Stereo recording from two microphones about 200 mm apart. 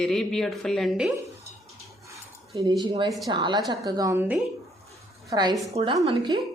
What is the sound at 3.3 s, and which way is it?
A woman's voice, 20° right (ahead or behind).